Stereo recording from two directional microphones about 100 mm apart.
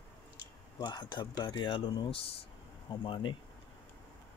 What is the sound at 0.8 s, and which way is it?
Speech, 45° left (ahead or behind).